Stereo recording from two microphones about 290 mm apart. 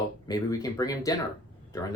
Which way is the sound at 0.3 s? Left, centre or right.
Centre.